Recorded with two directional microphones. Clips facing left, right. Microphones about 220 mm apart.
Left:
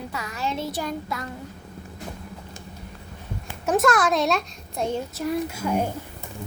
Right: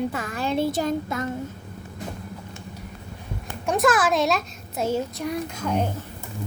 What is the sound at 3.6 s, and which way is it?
A child's voice, centre (ahead or behind).